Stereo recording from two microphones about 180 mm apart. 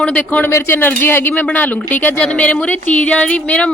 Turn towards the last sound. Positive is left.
turn(degrees=5)  # may be behind; listen again after turning